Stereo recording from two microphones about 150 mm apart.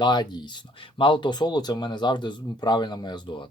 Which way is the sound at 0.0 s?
30° left (ahead or behind).